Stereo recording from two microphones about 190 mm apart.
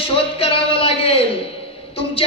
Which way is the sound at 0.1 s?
30° left (ahead or behind).